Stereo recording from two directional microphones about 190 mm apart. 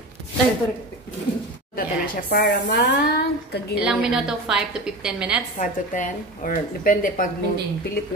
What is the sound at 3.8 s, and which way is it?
A woman's voice, 5° right (ahead or behind).